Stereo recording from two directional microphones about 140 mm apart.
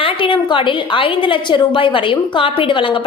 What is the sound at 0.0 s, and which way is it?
A woman's voice, 40° left (ahead or behind).